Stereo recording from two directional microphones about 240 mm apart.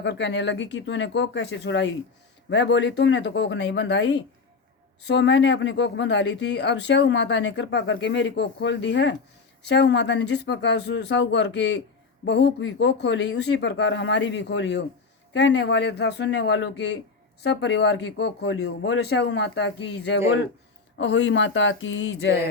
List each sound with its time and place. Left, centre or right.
0.0 s speech: left